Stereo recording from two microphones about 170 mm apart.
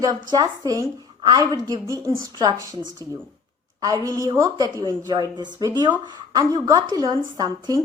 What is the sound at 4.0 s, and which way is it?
A woman's voice, 20° right (ahead or behind).